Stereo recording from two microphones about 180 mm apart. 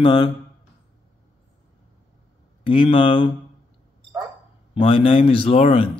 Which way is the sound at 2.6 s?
25° left (ahead or behind).